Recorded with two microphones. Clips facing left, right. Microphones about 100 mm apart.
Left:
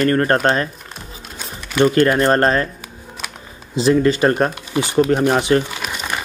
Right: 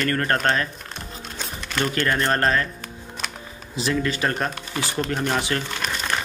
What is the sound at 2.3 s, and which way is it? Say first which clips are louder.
Speech: left 6 dB; 30° left (ahead or behind).